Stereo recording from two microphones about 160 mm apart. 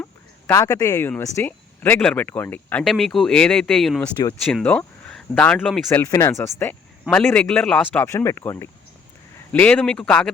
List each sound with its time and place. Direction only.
0.0 s a sound: 15° left (ahead or behind)
1.2 s speech: 15° left (ahead or behind)
5.9 s speech: 20° left (ahead or behind)